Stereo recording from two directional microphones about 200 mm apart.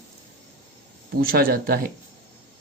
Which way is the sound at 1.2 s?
45° right (ahead or behind).